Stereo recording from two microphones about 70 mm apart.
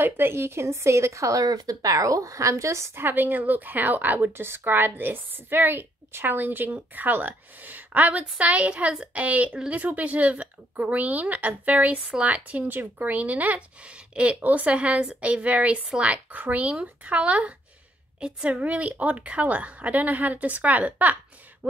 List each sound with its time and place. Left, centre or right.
0.0 s a woman's voice: right
1.4 s a woman's voice: right